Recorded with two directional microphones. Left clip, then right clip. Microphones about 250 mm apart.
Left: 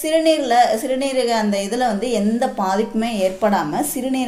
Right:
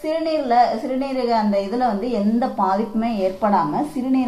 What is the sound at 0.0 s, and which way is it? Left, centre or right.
A woman's voice, left.